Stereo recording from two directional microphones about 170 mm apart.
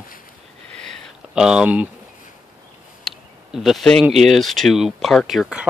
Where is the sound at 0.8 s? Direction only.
5° right (ahead or behind).